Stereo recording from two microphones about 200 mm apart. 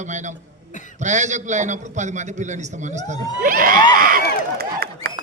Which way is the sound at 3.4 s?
45° right (ahead or behind).